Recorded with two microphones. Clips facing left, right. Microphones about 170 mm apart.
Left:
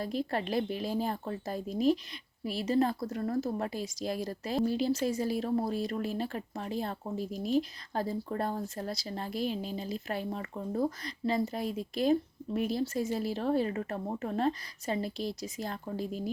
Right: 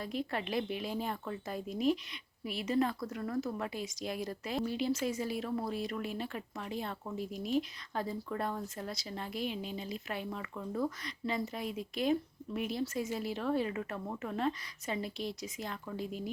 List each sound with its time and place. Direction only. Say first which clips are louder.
0.0 s a woman's voice: left 4 dB; 35° left (ahead or behind)